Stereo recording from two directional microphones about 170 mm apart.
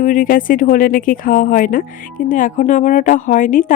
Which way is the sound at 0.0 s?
50° left (ahead or behind).